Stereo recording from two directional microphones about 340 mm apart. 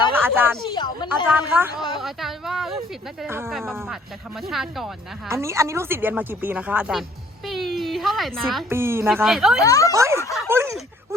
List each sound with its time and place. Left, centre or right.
0.1 s speech: centre
0.6 s a sound: centre
1.4 s a woman's voice: centre
9.6 s speech: centre
9.9 s speech: centre
10.2 s a sound: centre